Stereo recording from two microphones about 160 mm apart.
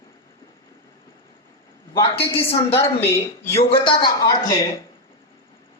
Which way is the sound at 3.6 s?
35° left (ahead or behind).